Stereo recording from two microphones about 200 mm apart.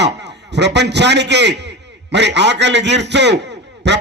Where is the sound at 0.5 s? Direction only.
60° right (ahead or behind).